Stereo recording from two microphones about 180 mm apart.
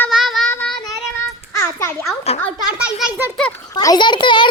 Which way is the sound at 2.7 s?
5° right (ahead or behind).